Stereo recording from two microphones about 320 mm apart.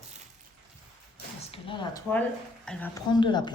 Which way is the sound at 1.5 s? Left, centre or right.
Centre.